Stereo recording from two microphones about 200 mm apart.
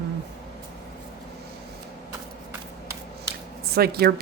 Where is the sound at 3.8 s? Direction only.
50° right (ahead or behind).